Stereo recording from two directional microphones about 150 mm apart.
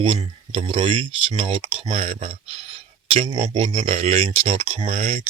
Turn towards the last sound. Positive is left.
turn(degrees=-40)  # may be behind; listen again after turning